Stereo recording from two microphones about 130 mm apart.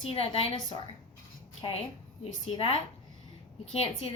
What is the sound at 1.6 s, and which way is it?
A woman's voice, 40° left (ahead or behind).